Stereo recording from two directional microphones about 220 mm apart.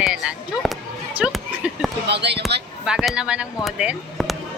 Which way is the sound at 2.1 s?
50° right (ahead or behind).